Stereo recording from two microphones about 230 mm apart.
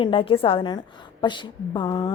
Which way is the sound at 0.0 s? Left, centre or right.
Left.